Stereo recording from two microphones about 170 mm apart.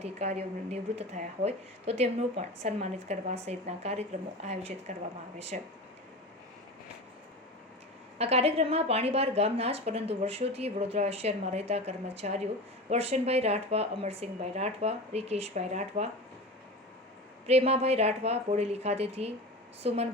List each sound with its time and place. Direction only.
0.0 s a woman's voice: 40° right (ahead or behind)
8.2 s a woman's voice: 35° right (ahead or behind)
17.4 s a woman's voice: 40° right (ahead or behind)